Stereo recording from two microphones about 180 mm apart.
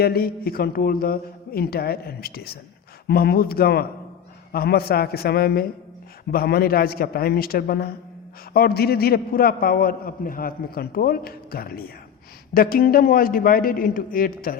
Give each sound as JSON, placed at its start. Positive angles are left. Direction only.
{"t": 0.0, "sound": "a man's voice", "side_deg": 60}